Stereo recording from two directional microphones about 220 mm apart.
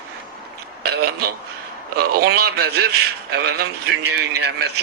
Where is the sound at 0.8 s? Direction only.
45° right (ahead or behind).